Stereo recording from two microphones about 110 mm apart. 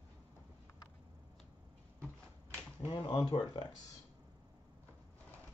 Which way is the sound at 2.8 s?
45° left (ahead or behind).